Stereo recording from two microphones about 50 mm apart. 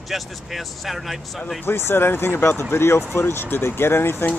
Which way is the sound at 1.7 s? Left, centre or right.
Left.